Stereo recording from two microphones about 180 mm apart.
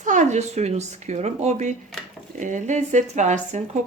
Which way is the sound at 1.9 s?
Centre (ahead or behind).